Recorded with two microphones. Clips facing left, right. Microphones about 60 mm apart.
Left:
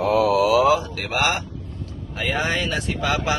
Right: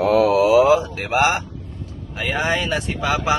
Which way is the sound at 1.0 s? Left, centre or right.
Right.